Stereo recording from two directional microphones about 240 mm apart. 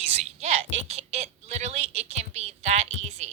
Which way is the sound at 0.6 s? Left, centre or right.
Right.